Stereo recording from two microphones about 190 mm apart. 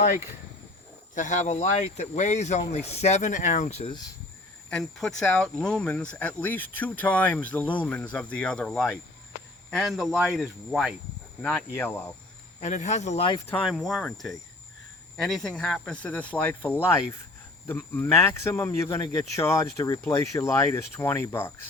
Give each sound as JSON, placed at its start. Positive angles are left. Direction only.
{"t": 1.1, "sound": "speech", "side_deg": 40}
{"t": 4.7, "sound": "speech", "side_deg": 5}
{"t": 11.4, "sound": "speech", "side_deg": 10}
{"t": 12.5, "sound": "speech", "side_deg": 40}
{"t": 13.7, "sound": "speech", "side_deg": 0}